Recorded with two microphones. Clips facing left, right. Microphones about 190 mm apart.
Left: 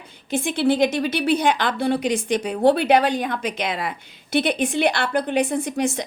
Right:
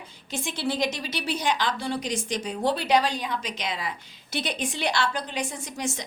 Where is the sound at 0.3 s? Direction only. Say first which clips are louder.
Left 9 dB; 55° left (ahead or behind).